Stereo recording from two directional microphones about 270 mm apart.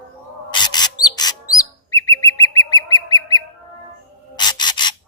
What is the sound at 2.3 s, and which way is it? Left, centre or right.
Bird, left.